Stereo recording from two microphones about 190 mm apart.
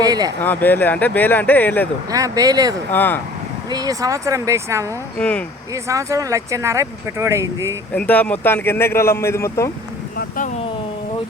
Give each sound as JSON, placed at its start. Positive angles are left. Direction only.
{"t": 0.0, "sound": "speech", "side_deg": -20}
{"t": 0.4, "sound": "speech", "side_deg": 10}
{"t": 2.0, "sound": "speech", "side_deg": -20}
{"t": 2.9, "sound": "speech", "side_deg": 10}
{"t": 3.7, "sound": "speech", "side_deg": -20}
{"t": 5.1, "sound": "speech", "side_deg": 5}
{"t": 5.7, "sound": "speech", "side_deg": -15}
{"t": 7.9, "sound": "speech", "side_deg": 10}
{"t": 10.2, "sound": "a sound", "side_deg": 45}